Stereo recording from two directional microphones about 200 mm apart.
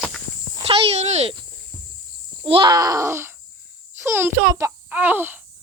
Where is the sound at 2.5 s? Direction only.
25° right (ahead or behind).